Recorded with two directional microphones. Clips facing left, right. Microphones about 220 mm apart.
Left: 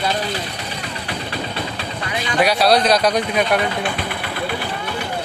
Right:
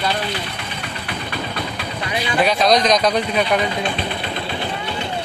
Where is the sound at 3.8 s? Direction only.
20° right (ahead or behind).